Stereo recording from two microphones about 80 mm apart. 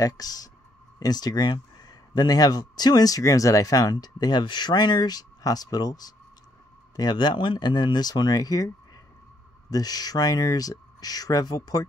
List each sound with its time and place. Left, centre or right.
0.0 s speech: left